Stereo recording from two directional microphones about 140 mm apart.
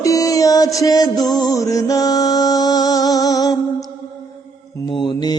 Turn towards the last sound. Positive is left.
turn(degrees=30)  # may be behind; listen again after turning